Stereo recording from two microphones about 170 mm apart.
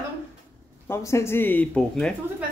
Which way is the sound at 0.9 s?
15° left (ahead or behind).